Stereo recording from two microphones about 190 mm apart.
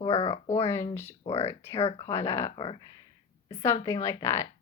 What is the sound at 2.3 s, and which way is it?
Speech, 15° left (ahead or behind).